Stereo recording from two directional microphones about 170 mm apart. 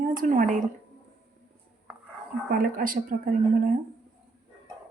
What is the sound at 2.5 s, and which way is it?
Speech, 55° right (ahead or behind).